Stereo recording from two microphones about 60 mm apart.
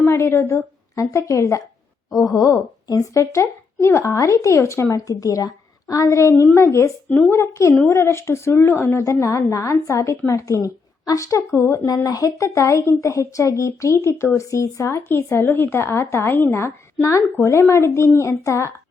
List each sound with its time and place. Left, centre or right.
0.0 s a woman's voice: left
2.1 s a woman's voice: left
6.1 s a woman's voice: left
9.5 s a woman's voice: left
11.6 s speech: left
11.9 s a woman's voice: left
15.1 s a woman's voice: left
17.3 s speech: left